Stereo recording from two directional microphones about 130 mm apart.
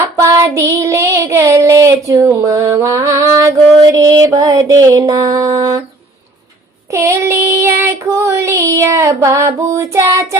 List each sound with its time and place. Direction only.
0.0 s female singing: 20° right (ahead or behind)
2.0 s music: 25° right (ahead or behind)
6.9 s child singing: 20° right (ahead or behind)